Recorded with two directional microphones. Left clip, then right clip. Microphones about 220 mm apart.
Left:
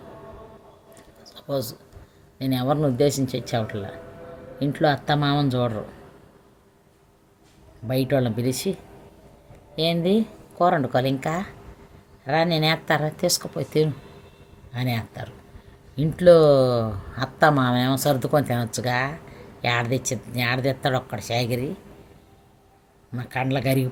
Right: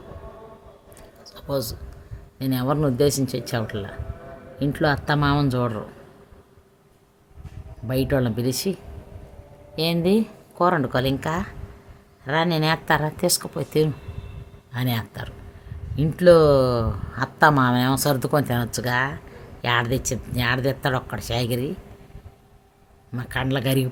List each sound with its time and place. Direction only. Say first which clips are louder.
1.2 s a sound: right 1 dB; 15° right (ahead or behind)
2.4 s speech: even; 15° right (ahead or behind)
7.9 s speech: even; 15° right (ahead or behind)
9.7 s speech: even; 15° right (ahead or behind)
23.1 s speech: even; 15° right (ahead or behind)